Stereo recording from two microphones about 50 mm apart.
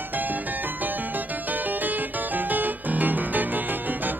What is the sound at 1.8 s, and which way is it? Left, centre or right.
Music, right.